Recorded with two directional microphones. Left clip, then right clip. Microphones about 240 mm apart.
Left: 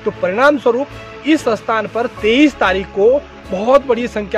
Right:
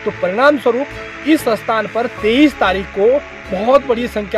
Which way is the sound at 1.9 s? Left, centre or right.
Centre.